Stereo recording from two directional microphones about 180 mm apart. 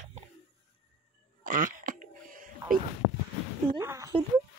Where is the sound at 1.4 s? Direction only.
50° right (ahead or behind).